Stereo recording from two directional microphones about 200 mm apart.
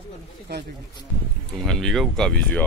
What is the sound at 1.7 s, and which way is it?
Speech, centre (ahead or behind).